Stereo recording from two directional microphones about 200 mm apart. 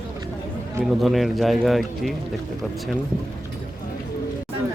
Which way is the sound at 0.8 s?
Centre (ahead or behind).